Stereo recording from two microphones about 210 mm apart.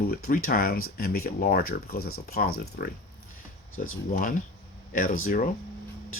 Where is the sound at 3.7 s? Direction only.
75° left (ahead or behind).